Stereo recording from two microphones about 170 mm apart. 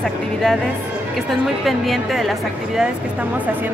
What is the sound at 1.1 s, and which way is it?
A woman's voice, centre (ahead or behind).